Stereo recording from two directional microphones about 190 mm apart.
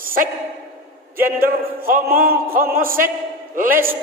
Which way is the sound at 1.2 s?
50° right (ahead or behind).